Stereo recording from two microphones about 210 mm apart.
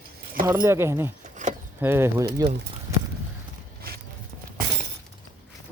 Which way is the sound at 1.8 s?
10° right (ahead or behind).